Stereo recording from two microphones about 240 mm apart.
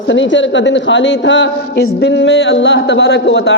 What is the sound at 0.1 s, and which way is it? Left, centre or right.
Speech, left.